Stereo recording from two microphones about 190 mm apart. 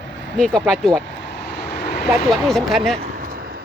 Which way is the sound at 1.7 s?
60° left (ahead or behind).